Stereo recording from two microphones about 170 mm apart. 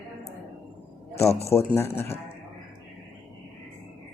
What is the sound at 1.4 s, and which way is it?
Speech, 15° left (ahead or behind).